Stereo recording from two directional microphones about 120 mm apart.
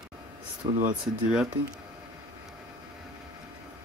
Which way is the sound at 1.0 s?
5° right (ahead or behind).